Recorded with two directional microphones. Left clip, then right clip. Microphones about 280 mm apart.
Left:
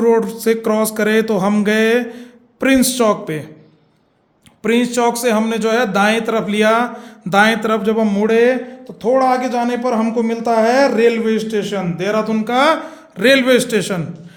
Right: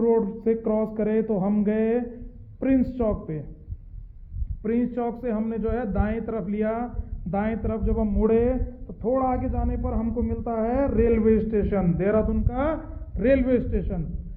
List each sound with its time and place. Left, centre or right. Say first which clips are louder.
0.0 s a man's voice: left 8 dB; left
4.6 s speech: left 12 dB; centre